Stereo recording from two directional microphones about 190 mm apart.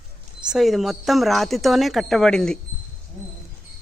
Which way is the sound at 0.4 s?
Centre (ahead or behind).